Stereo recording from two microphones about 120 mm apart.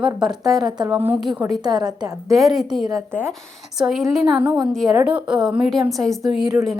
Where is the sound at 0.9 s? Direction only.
15° right (ahead or behind).